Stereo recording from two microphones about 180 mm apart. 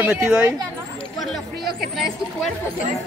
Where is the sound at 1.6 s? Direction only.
55° right (ahead or behind).